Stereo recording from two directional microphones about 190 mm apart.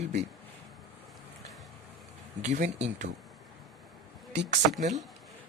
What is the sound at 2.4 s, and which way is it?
Speech, 35° right (ahead or behind).